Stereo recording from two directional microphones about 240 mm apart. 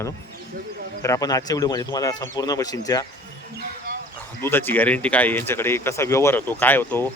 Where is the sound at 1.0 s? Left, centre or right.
Centre.